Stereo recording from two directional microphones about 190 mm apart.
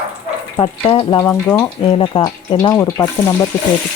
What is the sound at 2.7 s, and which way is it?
Speech, 15° left (ahead or behind).